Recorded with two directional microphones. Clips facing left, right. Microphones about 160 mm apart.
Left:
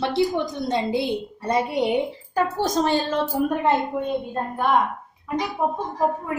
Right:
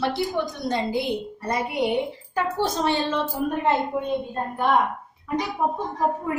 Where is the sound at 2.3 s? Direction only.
40° left (ahead or behind).